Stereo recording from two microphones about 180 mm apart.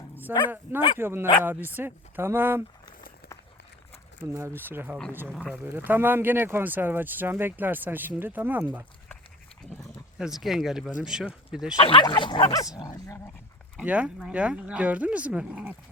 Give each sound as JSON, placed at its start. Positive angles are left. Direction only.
{"t": 0.3, "sound": "speech", "side_deg": -10}
{"t": 4.2, "sound": "speech", "side_deg": -15}
{"t": 11.8, "sound": "speech", "side_deg": 30}
{"t": 13.7, "sound": "speech", "side_deg": -5}